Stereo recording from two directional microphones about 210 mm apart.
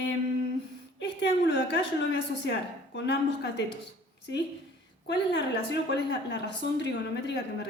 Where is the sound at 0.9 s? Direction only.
55° left (ahead or behind).